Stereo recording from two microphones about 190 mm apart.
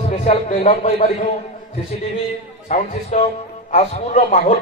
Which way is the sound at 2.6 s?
35° left (ahead or behind).